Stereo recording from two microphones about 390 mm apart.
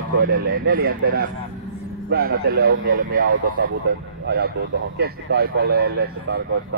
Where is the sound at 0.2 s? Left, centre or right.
Right.